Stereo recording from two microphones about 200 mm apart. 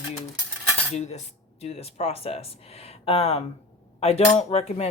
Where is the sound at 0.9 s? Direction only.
35° left (ahead or behind).